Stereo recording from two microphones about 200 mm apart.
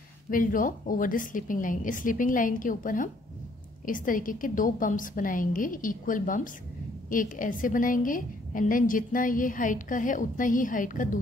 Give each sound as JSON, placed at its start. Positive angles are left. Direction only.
{"t": 0.3, "sound": "a woman's voice", "side_deg": 45}